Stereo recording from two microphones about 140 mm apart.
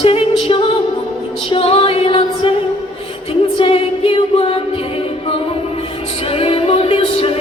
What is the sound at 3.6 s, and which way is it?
Music, 45° left (ahead or behind).